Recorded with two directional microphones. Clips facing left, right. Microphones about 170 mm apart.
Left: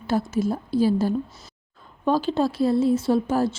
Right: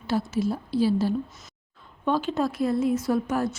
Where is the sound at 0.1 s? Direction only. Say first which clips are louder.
Left 2 dB; 45° left (ahead or behind).